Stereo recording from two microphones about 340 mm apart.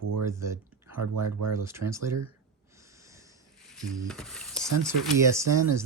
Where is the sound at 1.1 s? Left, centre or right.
Right.